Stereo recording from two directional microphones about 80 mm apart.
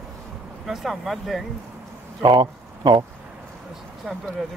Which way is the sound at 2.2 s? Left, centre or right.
Right.